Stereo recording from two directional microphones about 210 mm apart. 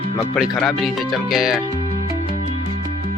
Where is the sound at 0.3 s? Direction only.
Centre (ahead or behind).